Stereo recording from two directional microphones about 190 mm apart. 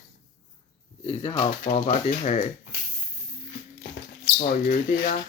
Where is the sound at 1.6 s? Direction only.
35° left (ahead or behind).